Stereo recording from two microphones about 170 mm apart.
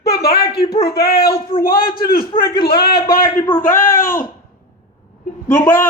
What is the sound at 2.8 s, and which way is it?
A man's voice, 60° left (ahead or behind).